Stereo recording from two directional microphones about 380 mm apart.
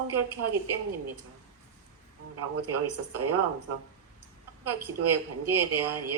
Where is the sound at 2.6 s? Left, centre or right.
Right.